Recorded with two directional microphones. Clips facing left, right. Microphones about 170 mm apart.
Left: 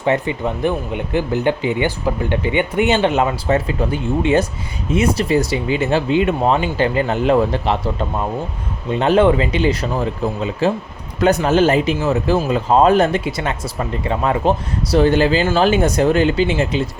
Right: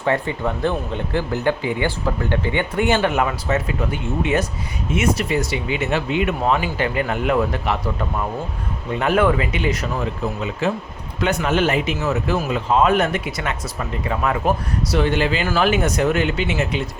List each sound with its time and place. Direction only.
0.0 s speech: 20° left (ahead or behind)